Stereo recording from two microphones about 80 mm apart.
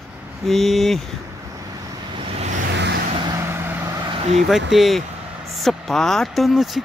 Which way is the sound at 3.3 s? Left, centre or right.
Right.